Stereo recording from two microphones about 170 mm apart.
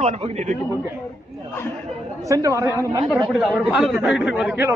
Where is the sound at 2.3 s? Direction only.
20° right (ahead or behind).